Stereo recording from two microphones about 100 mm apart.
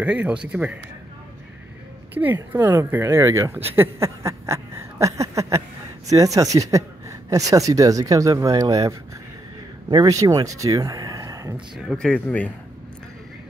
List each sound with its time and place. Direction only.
0.0 s speech: 15° right (ahead or behind)
2.1 s speech: 20° right (ahead or behind)
3.7 s a sound: 25° right (ahead or behind)
6.0 s speech: 35° right (ahead or behind)
10.0 s speech: 35° right (ahead or behind)
11.5 s speech: 5° right (ahead or behind)
12.0 s speech: 15° left (ahead or behind)